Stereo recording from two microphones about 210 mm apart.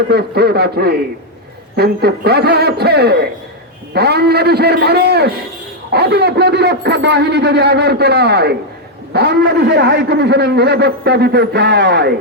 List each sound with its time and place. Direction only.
0.1 s a man's voice: 50° right (ahead or behind)